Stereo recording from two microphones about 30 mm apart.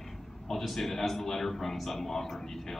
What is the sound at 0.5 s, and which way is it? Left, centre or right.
A man's voice, centre.